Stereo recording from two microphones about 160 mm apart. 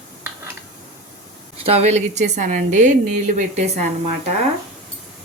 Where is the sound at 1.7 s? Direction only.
40° right (ahead or behind).